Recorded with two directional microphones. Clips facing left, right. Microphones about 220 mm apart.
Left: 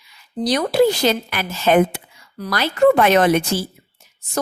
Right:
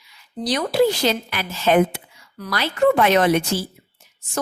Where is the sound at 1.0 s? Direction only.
45° left (ahead or behind).